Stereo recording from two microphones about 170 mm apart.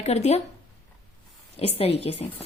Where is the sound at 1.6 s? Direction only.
35° left (ahead or behind).